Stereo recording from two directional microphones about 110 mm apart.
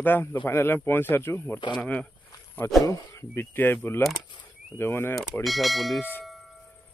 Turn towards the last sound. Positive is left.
turn(degrees=20)  # may be behind; listen again after turning